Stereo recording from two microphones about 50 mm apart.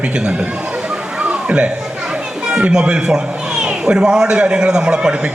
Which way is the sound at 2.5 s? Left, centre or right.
Right.